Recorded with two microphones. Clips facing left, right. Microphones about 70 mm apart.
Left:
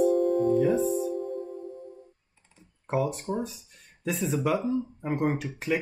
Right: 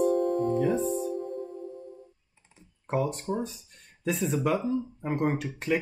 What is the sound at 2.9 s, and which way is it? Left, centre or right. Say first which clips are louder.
Speech: left 1 dB; centre.